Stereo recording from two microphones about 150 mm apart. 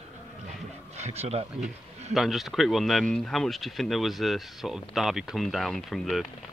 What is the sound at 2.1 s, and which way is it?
Speech, centre (ahead or behind).